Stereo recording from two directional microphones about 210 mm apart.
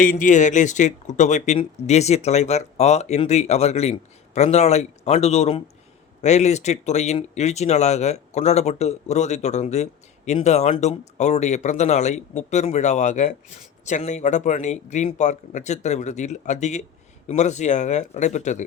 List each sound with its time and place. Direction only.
0.0 s speech: 40° left (ahead or behind)